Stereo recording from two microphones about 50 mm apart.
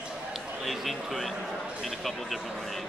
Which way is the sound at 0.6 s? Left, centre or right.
Centre.